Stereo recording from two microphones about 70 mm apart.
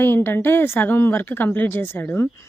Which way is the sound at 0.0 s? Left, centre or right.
Left.